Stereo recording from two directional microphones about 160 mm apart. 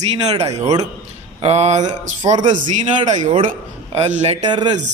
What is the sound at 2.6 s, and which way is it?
Speech, 50° right (ahead or behind).